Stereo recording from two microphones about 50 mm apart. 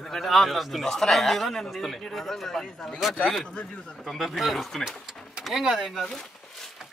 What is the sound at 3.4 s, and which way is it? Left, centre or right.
Speech, centre.